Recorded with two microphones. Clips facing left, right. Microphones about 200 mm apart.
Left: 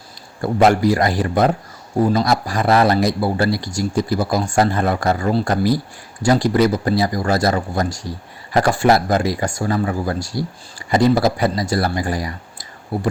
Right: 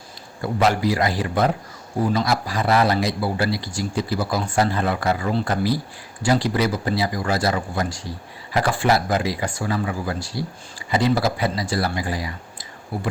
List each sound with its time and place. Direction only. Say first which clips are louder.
0.4 s speech: left 6 dB; 45° left (ahead or behind)